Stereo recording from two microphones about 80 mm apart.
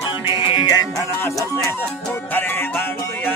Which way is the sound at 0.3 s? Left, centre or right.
Left.